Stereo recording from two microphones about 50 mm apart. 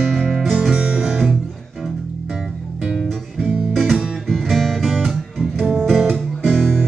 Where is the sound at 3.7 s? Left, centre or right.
Centre.